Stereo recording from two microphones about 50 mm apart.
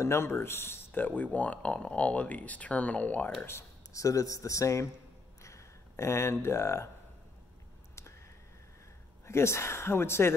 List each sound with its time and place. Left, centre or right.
0.0 s speech: left
0.9 s speech: left
3.4 s speech: left
5.4 s a sound: left
9.2 s speech: left